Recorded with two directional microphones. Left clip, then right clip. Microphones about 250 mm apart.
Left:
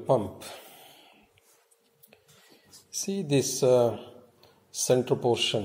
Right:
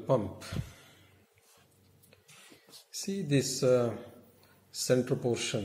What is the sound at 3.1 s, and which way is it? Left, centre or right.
Speech, left.